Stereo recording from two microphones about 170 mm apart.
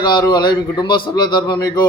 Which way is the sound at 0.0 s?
25° left (ahead or behind).